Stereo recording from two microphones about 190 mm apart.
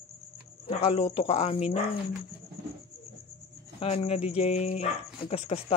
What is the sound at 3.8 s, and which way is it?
Speech, 35° left (ahead or behind).